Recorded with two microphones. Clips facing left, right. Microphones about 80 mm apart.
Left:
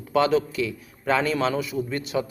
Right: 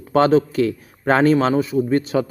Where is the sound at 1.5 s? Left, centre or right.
Right.